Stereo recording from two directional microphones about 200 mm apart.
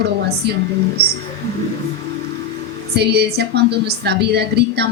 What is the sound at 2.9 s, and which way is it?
A woman's voice, 55° right (ahead or behind).